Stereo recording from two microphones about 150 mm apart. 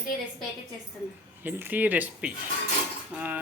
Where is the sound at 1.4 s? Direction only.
10° right (ahead or behind).